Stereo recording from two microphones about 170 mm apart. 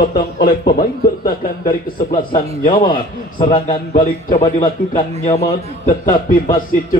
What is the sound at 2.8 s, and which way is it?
Speech, 25° left (ahead or behind).